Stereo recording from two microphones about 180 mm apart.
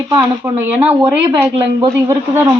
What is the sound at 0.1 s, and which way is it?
Speech, 15° right (ahead or behind).